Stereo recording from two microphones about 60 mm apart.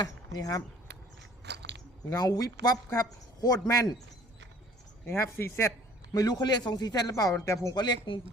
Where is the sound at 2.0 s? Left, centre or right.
Left.